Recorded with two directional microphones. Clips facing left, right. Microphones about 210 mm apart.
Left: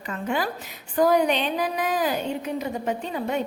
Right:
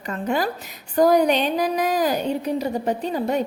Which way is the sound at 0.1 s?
40° right (ahead or behind).